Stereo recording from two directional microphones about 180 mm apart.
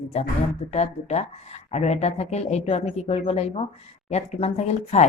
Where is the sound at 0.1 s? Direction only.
40° left (ahead or behind).